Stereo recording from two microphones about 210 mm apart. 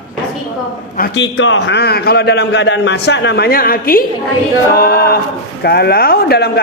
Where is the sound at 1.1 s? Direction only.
65° left (ahead or behind).